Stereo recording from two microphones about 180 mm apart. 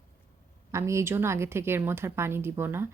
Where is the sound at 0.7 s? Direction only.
15° right (ahead or behind).